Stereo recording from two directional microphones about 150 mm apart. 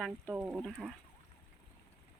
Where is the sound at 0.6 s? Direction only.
5° left (ahead or behind).